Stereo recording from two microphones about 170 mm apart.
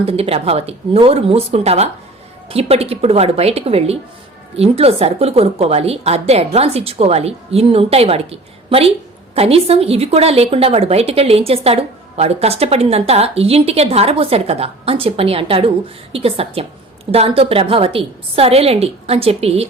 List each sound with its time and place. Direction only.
0.0 s a woman's voice: 35° right (ahead or behind)